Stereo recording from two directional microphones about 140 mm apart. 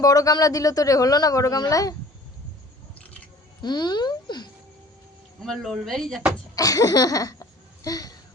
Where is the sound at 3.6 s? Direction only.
30° left (ahead or behind).